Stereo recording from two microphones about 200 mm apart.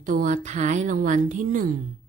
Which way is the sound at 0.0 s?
40° right (ahead or behind).